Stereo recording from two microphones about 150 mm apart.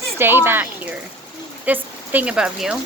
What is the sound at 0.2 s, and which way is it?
Speech, 15° right (ahead or behind).